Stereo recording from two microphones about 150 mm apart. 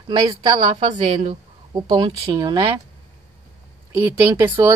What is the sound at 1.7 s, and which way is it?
Speech, 25° right (ahead or behind).